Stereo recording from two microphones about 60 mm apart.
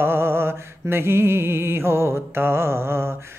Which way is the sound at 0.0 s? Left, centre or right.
Right.